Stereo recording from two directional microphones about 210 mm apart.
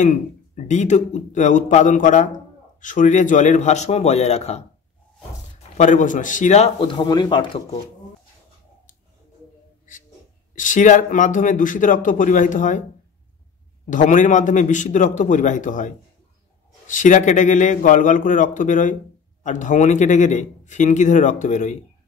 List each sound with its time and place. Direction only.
0.0 s a man's voice: 35° left (ahead or behind)
10.5 s a man's voice: 40° left (ahead or behind)
13.8 s a man's voice: 35° left (ahead or behind)